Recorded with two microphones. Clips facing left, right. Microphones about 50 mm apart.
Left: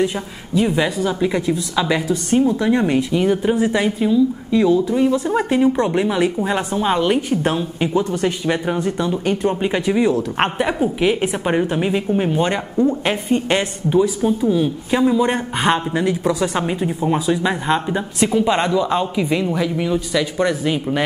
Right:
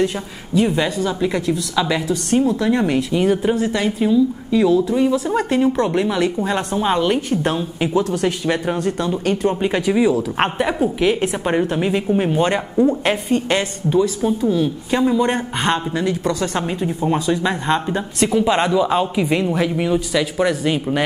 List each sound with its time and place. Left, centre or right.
0.6 s a woman's voice: centre
3.5 s a woman's voice: centre
4.0 s a woman's voice: centre
13.3 s a woman's voice: centre
20.1 s a woman's voice: centre